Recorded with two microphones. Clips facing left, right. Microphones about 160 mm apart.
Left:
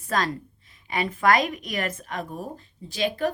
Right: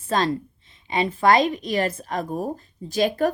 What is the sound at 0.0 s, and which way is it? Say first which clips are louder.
A woman's voice: right 4 dB; 25° right (ahead or behind).